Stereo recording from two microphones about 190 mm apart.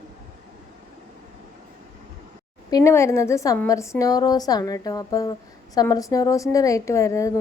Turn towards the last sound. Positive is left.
turn(degrees=15)  # may be behind; listen again after turning